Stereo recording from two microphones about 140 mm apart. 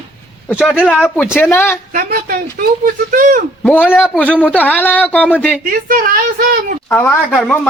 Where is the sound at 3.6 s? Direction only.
10° left (ahead or behind).